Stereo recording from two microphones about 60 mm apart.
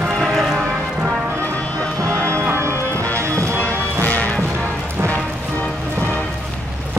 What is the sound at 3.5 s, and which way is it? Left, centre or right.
Music, left.